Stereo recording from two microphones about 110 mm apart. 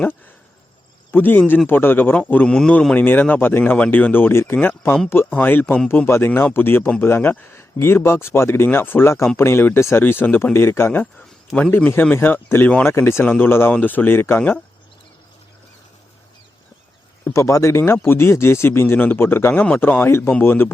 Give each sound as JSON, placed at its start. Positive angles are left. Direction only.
{"t": 1.1, "sound": "a man's voice", "side_deg": 15}
{"t": 17.2, "sound": "speech", "side_deg": 25}